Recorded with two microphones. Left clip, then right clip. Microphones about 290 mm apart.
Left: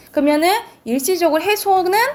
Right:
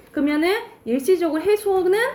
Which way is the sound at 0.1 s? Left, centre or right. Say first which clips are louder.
Left 6 dB; centre.